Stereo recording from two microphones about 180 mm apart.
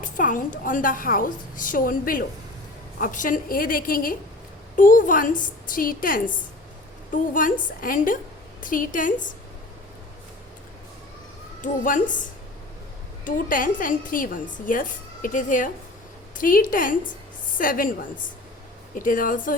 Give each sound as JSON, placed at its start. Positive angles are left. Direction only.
{"t": 0.0, "sound": "a woman's voice", "side_deg": 45}
{"t": 11.6, "sound": "a woman's voice", "side_deg": 45}
{"t": 13.2, "sound": "a woman's voice", "side_deg": 50}
{"t": 18.9, "sound": "a woman's voice", "side_deg": 50}